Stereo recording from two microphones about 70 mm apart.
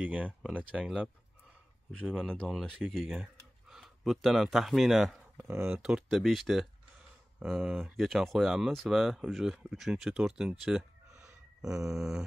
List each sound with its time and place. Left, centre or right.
0.0 s speech: right
2.0 s speech: centre
3.1 s speech: centre
5.4 s speech: right
5.8 s speech: centre
7.7 s speech: right
8.0 s speech: centre